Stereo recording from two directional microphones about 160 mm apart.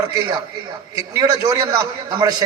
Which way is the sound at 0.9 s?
25° right (ahead or behind).